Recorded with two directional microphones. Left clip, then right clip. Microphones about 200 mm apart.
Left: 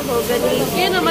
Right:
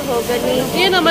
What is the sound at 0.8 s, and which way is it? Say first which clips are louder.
Speech: right 5 dB; 50° right (ahead or behind).